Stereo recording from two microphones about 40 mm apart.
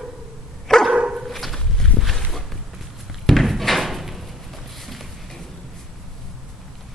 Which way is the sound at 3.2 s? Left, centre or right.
Centre.